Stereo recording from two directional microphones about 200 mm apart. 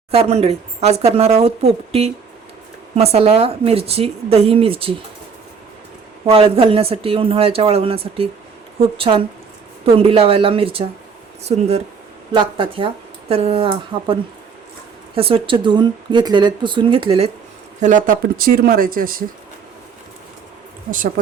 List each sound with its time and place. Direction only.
0.1 s speech: 30° right (ahead or behind)
6.2 s speech: 30° right (ahead or behind); by 19.2 s 45° right (ahead or behind)